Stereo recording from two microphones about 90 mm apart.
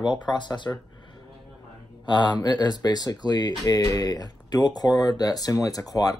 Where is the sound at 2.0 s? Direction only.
60° left (ahead or behind).